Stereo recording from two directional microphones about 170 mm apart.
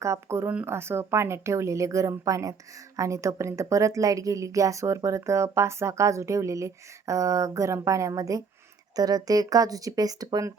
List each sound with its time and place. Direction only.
0.0 s speech: 15° right (ahead or behind)